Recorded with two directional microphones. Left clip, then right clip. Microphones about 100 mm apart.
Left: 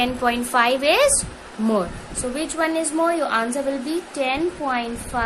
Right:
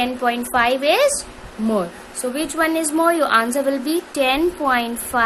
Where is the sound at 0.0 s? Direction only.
10° right (ahead or behind).